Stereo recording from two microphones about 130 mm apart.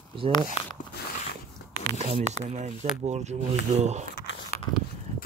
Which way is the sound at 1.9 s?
60° right (ahead or behind).